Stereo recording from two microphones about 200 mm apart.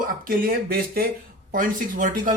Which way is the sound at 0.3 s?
45° right (ahead or behind).